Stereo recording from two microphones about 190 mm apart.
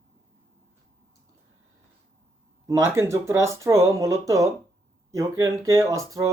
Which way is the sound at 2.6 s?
15° right (ahead or behind).